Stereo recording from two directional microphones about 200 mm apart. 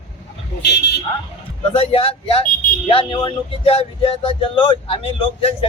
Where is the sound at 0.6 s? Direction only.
60° left (ahead or behind).